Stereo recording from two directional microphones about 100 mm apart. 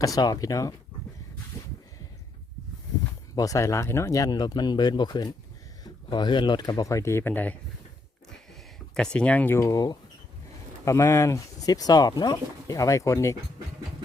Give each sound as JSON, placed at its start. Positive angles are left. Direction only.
{"t": 0.0, "sound": "speech", "side_deg": 40}
{"t": 3.3, "sound": "speech", "side_deg": 35}
{"t": 9.0, "sound": "speech", "side_deg": 10}
{"t": 9.6, "sound": "speech", "side_deg": 35}